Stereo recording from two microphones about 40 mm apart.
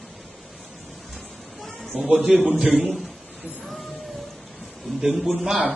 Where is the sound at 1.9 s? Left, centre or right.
Centre.